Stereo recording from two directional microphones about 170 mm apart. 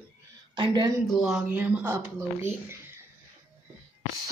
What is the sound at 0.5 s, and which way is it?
Speech, 25° right (ahead or behind).